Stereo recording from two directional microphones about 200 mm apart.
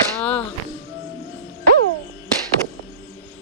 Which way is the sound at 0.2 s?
5° left (ahead or behind).